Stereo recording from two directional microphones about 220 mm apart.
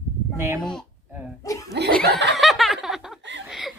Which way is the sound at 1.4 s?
15° left (ahead or behind).